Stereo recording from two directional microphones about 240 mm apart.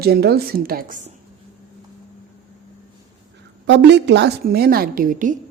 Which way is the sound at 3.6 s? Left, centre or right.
Right.